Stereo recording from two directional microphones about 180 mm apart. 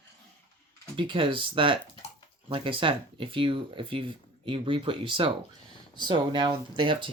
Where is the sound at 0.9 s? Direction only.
30° right (ahead or behind).